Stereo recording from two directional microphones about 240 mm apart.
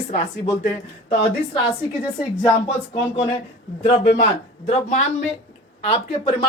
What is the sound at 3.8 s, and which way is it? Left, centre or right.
Speech, left.